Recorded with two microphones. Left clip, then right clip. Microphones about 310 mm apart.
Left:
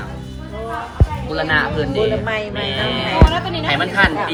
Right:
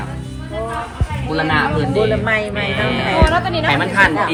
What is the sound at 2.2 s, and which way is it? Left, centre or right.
Music, right.